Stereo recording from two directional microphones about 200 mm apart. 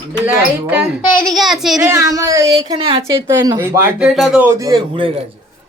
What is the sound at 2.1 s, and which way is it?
Speech, 15° right (ahead or behind).